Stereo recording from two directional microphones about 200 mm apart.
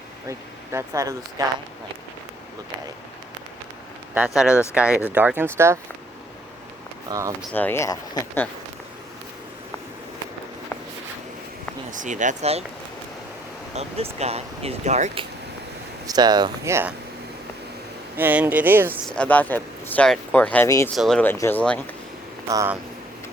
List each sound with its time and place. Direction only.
0.3 s speech: 15° right (ahead or behind)
4.1 s speech: 5° right (ahead or behind)
7.1 s speech: 15° right (ahead or behind)
7.5 s speech: 10° left (ahead or behind)
11.9 s speech: 40° right (ahead or behind)
13.7 s speech: 30° right (ahead or behind)
16.0 s speech: 20° right (ahead or behind)
18.2 s speech: 10° right (ahead or behind)
19.0 s speech: 5° left (ahead or behind)
20.9 s speech: centre (ahead or behind)
22.4 s speech: 15° right (ahead or behind)